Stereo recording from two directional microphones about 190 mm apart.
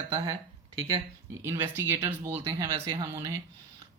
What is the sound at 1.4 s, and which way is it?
Speech, 10° right (ahead or behind).